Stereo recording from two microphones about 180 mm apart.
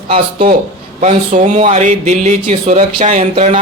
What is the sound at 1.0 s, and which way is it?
Speech, 40° right (ahead or behind).